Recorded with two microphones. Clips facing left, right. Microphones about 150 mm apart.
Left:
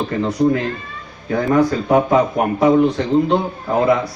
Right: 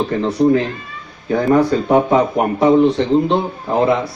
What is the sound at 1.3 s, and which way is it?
Speech, 25° right (ahead or behind).